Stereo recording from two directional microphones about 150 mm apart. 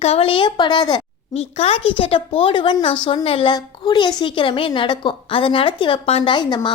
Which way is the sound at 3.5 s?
30° left (ahead or behind).